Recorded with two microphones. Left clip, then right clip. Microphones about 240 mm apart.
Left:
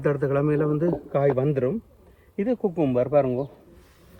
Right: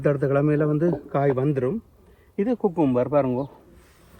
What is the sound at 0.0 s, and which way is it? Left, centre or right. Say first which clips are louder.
Speech: right 2 dB; left.